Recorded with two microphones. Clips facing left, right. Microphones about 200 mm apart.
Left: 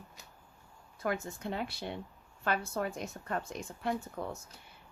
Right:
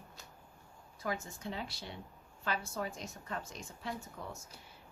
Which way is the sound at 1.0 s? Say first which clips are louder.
Left 4 dB; 60° left (ahead or behind).